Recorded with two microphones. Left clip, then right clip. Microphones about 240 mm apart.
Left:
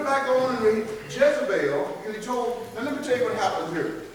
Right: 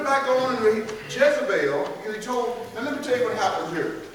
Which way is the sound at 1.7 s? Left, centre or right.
Centre.